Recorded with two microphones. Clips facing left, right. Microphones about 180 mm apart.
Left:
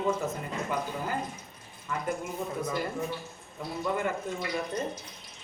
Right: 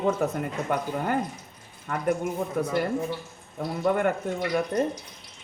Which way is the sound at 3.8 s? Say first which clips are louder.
Right 7 dB; 60° right (ahead or behind).